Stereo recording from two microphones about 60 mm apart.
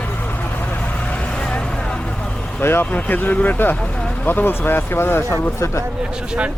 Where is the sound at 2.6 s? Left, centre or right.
Left.